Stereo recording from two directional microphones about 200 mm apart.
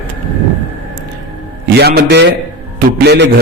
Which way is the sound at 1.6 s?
55° right (ahead or behind).